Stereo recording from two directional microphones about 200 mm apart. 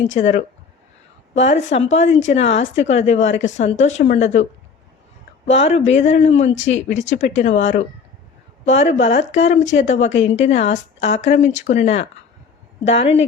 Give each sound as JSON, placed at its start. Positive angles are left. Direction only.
{"t": 0.0, "sound": "a woman's voice", "side_deg": 35}
{"t": 5.5, "sound": "a woman's voice", "side_deg": 35}
{"t": 6.5, "sound": "speech", "side_deg": 70}
{"t": 6.7, "sound": "a woman's voice", "side_deg": 35}